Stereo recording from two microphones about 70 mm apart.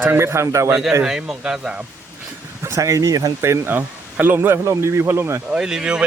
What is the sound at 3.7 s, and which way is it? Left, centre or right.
Speech, right.